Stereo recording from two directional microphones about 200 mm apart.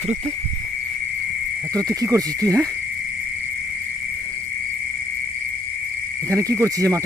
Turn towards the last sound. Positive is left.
turn(degrees=-15)  # may be behind; listen again after turning